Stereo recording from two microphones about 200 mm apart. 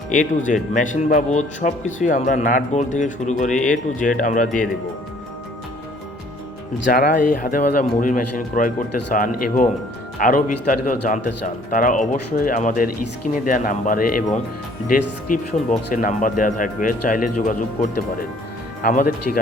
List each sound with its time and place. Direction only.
0.1 s speech: 40° left (ahead or behind)
6.7 s speech: 50° left (ahead or behind)
15.3 s speech: 40° left (ahead or behind)
18.8 s speech: 45° left (ahead or behind)